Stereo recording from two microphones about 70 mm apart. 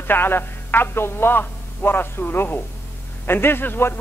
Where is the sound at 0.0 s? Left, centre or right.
Left.